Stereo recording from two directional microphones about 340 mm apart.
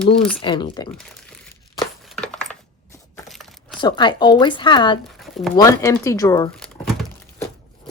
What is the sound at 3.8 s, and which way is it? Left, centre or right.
Speech, centre.